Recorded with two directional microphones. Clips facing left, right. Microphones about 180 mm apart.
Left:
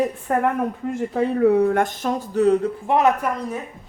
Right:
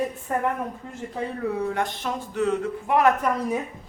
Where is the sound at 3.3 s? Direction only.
5° left (ahead or behind).